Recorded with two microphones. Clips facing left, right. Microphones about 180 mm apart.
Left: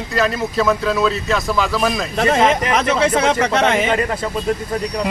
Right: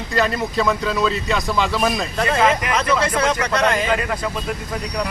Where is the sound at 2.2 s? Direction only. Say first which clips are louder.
Left 3 dB; 30° left (ahead or behind).